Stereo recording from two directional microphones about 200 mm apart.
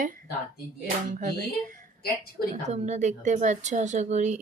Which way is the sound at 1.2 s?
40° right (ahead or behind).